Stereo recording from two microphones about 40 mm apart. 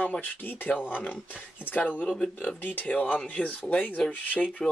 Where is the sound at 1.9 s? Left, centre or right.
Left.